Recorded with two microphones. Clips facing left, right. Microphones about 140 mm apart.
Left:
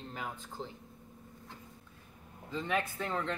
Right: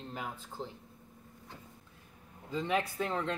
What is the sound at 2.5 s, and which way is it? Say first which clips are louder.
Speech: right 2 dB; 15° right (ahead or behind).